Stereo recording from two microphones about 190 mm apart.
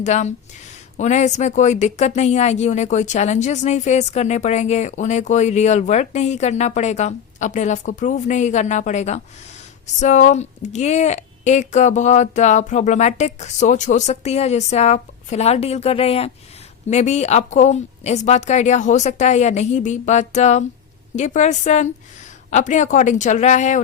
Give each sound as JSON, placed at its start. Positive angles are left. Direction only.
{"t": 0.0, "sound": "speech", "side_deg": 40}